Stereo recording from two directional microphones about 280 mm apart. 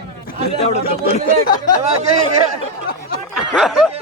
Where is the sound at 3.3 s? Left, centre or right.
Centre.